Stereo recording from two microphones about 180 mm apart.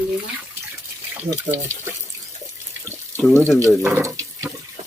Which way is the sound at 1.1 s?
15° right (ahead or behind).